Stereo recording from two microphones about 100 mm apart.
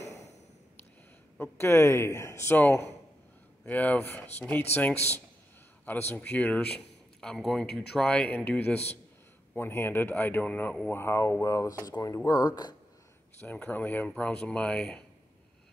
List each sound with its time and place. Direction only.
1.4 s speech: 25° left (ahead or behind)
6.2 s speech: 15° left (ahead or behind)
10.9 s speech: 25° left (ahead or behind); by 12.7 s 45° left (ahead or behind)
13.4 s speech: 20° left (ahead or behind); by 15.0 s 5° left (ahead or behind)